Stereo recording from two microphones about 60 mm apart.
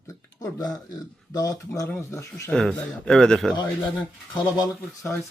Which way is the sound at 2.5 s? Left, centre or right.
Centre.